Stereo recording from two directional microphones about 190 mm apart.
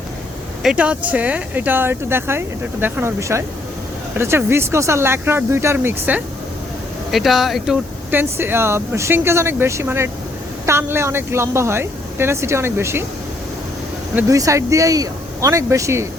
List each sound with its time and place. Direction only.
0.6 s speech: 5° right (ahead or behind)
14.2 s speech: 15° right (ahead or behind)